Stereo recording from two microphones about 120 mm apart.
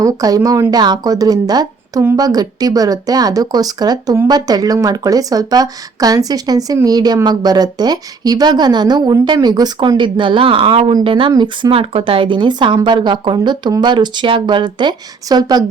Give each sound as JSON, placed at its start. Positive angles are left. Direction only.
{"t": 0.0, "sound": "speech", "side_deg": -30}